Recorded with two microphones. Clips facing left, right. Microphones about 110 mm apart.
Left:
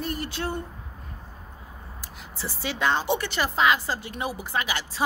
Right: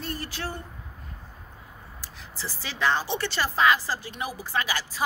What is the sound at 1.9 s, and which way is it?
Speech, 20° left (ahead or behind).